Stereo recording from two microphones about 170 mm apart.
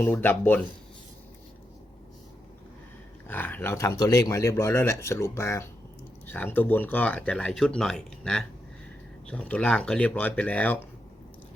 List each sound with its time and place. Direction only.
0.0 s speech: 10° left (ahead or behind)
3.2 s speech: 10° left (ahead or behind)